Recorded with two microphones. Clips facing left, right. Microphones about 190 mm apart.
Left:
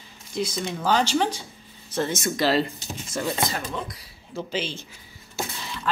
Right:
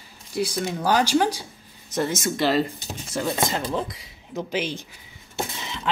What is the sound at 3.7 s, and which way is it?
Speech, 30° right (ahead or behind).